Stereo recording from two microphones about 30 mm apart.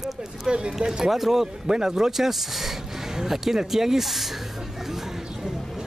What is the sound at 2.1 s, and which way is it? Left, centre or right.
Speech, centre.